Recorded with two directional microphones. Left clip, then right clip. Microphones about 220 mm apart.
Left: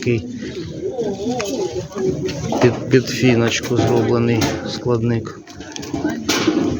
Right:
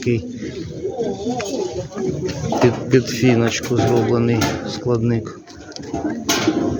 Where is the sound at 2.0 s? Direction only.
50° left (ahead or behind).